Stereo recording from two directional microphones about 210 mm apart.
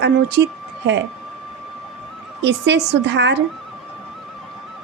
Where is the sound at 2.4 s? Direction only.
55° right (ahead or behind).